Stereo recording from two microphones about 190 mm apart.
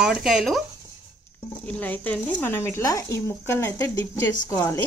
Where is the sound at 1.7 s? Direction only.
10° left (ahead or behind).